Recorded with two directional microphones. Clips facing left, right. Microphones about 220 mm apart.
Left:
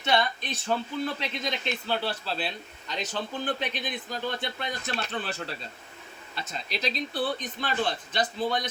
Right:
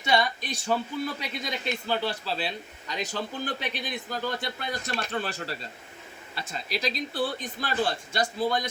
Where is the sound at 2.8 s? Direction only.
10° right (ahead or behind).